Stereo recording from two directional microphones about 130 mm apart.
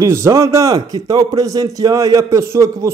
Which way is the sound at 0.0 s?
25° right (ahead or behind).